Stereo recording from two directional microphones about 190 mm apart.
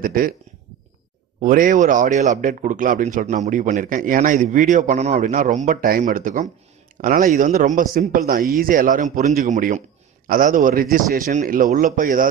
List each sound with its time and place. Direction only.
0.0 s a man's voice: 45° right (ahead or behind)
1.4 s a man's voice: 45° right (ahead or behind)